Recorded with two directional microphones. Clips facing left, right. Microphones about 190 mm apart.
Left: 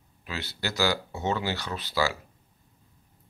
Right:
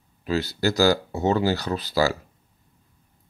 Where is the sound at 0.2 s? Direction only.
40° right (ahead or behind).